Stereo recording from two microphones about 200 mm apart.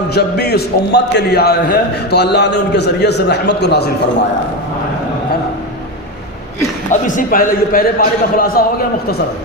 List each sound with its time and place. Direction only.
0.1 s a man's voice: 55° left (ahead or behind)
6.9 s a man's voice: 40° left (ahead or behind)